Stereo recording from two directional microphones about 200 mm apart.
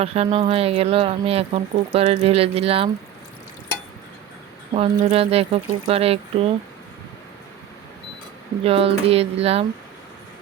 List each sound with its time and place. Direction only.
0.0 s speech: 30° right (ahead or behind)
4.7 s speech: 30° right (ahead or behind)
8.6 s speech: 30° right (ahead or behind)